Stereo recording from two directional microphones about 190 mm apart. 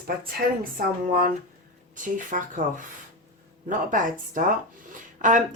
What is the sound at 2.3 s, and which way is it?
Speech, 45° right (ahead or behind).